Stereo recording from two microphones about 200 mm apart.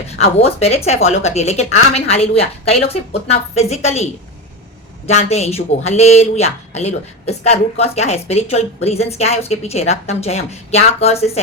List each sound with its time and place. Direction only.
0.2 s a woman's voice: 30° left (ahead or behind)